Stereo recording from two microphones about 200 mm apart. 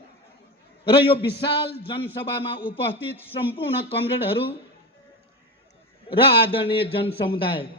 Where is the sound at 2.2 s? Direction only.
25° left (ahead or behind).